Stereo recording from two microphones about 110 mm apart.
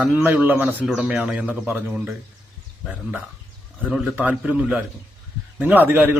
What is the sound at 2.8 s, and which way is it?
A man's voice, 10° right (ahead or behind).